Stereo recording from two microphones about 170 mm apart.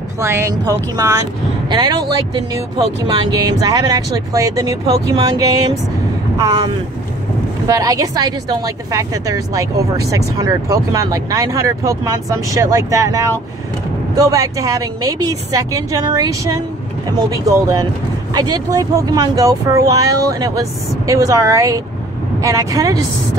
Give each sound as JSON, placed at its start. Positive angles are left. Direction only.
{"t": 0.2, "sound": "a woman's voice", "side_deg": -15}
{"t": 6.3, "sound": "a woman's voice", "side_deg": -25}